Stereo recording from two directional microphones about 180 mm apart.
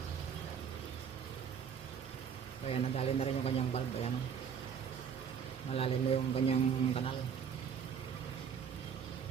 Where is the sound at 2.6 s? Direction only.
35° left (ahead or behind).